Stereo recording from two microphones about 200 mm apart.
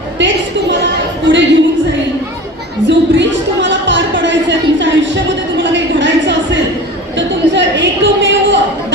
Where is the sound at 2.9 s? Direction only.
65° right (ahead or behind).